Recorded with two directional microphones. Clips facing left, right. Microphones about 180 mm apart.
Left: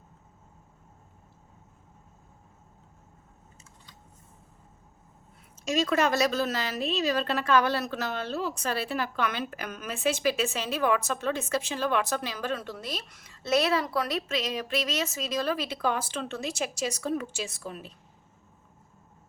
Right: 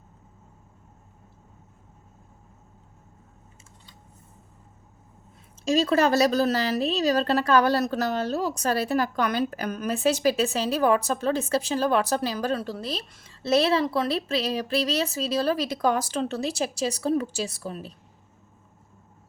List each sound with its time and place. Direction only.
5.6 s a woman's voice: 35° right (ahead or behind)